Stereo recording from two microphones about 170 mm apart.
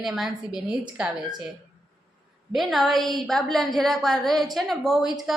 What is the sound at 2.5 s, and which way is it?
A woman's voice, centre (ahead or behind).